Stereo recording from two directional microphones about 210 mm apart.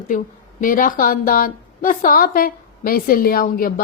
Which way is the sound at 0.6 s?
40° left (ahead or behind).